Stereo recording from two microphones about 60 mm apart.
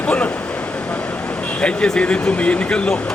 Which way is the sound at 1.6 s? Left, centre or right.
Centre.